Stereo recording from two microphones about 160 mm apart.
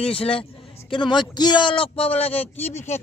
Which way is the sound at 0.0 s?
35° left (ahead or behind).